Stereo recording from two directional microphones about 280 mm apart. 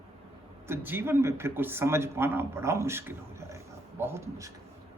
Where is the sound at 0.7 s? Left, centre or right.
Centre.